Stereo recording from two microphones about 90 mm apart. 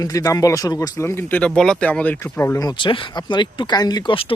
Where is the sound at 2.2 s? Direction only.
30° left (ahead or behind).